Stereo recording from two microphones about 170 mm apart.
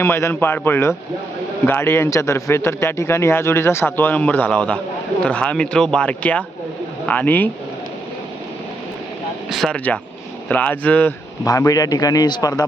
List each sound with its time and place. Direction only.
0.0 s speech: 15° left (ahead or behind)
9.5 s speech: centre (ahead or behind)
11.4 s speech: 20° left (ahead or behind)